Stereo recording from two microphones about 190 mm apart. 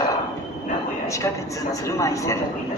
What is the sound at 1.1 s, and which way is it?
A man's voice, 15° left (ahead or behind).